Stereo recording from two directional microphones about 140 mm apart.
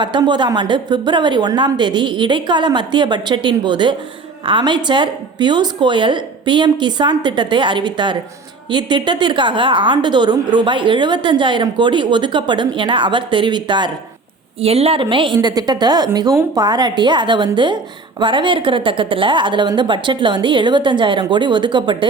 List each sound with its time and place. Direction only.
0.0 s a woman's voice: 30° right (ahead or behind)
14.6 s a woman's voice: 45° right (ahead or behind)